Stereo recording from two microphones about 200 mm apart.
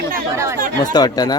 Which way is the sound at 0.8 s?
20° left (ahead or behind).